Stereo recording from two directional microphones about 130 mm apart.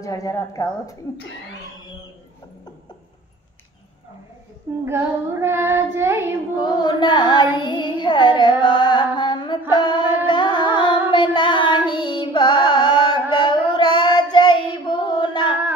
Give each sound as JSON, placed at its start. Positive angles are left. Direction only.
{"t": 0.0, "sound": "a woman's voice", "side_deg": 25}
{"t": 4.8, "sound": "child singing", "side_deg": -20}
{"t": 6.5, "sound": "a sound", "side_deg": 35}
{"t": 7.5, "sound": "music", "side_deg": 35}
{"t": 9.7, "sound": "female singing", "side_deg": 35}
{"t": 10.2, "sound": "carnatic music", "side_deg": 35}
{"t": 11.1, "sound": "singing", "side_deg": 35}
{"t": 11.9, "sound": "music", "side_deg": 35}
{"t": 13.3, "sound": "child singing", "side_deg": 35}